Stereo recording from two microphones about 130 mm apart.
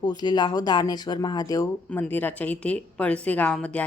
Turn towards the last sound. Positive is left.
turn(degrees=10)  # may be behind; listen again after turning